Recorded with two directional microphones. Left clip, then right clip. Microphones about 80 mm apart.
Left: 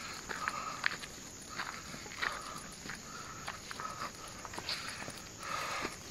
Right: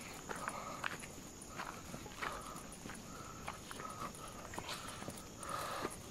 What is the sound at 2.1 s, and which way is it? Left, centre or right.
Walk, centre.